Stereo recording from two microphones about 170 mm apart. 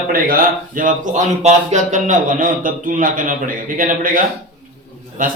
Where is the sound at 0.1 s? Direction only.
55° right (ahead or behind).